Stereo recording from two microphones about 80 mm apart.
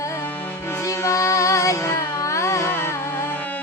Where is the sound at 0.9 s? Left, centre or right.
Left.